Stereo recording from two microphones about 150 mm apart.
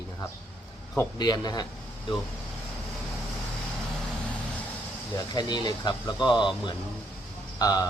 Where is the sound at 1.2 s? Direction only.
25° left (ahead or behind).